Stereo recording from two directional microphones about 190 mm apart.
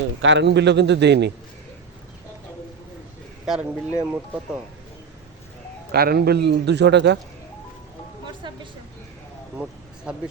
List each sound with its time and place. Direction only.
0.2 s a man's voice: 70° right (ahead or behind)
3.4 s speech: 5° right (ahead or behind)
5.9 s a man's voice: 55° right (ahead or behind)
10.1 s speech: 5° right (ahead or behind)